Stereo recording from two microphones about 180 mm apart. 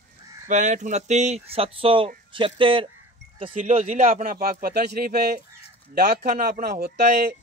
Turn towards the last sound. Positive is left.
turn(degrees=-60)  # may be behind; listen again after turning